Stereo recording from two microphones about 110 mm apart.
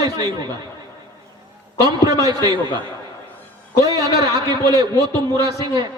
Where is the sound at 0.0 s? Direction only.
30° right (ahead or behind).